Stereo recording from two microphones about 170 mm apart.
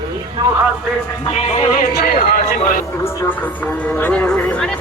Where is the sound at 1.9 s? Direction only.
60° left (ahead or behind).